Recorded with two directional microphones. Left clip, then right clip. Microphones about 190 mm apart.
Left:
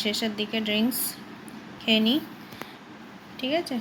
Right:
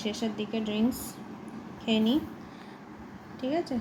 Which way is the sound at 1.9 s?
10° left (ahead or behind).